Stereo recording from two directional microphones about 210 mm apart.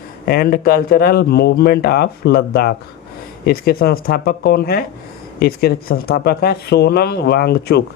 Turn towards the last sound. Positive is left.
turn(degrees=50)  # may be behind; listen again after turning